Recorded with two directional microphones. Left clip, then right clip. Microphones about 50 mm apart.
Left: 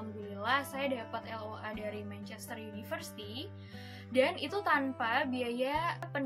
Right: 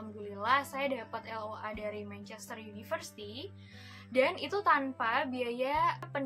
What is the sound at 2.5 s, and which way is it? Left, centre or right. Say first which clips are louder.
A woman's voice: right 2 dB; right.